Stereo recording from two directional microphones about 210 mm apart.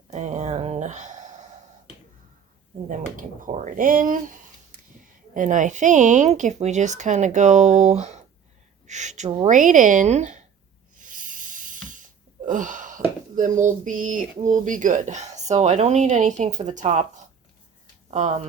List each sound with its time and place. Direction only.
0.1 s a sound: 35° right (ahead or behind)
3.2 s speech: 40° right (ahead or behind)
10.9 s snake: 40° right (ahead or behind)
12.5 s speech: 40° right (ahead or behind)
18.1 s speech: 35° right (ahead or behind)